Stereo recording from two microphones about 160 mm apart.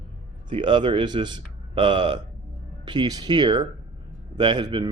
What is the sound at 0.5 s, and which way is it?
Speech, 30° right (ahead or behind).